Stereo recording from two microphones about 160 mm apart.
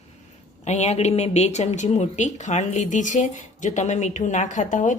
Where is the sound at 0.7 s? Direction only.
45° left (ahead or behind).